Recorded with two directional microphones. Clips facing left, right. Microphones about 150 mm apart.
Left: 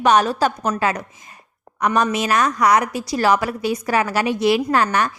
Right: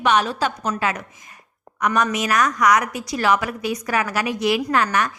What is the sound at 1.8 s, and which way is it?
A woman's voice, 30° left (ahead or behind).